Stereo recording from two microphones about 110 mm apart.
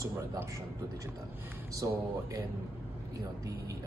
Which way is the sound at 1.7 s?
30° right (ahead or behind).